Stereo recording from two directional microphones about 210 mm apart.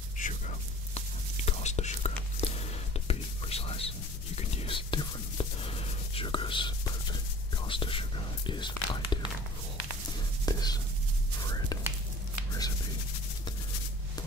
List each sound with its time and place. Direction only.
0.2 s whispering: 30° left (ahead or behind)
10.4 s whispering: 20° left (ahead or behind)